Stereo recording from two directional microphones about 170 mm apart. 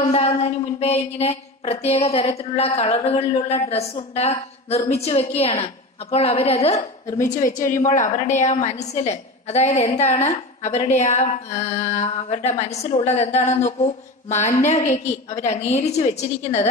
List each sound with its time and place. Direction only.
0.0 s a woman's voice: 40° left (ahead or behind)